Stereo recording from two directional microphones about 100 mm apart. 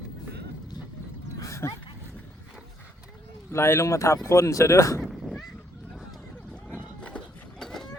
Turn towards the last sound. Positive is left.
turn(degrees=5)  # may be behind; listen again after turning